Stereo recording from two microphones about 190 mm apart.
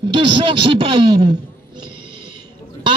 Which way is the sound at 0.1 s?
25° right (ahead or behind).